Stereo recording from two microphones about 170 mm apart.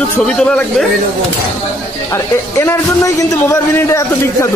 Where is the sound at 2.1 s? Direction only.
15° left (ahead or behind).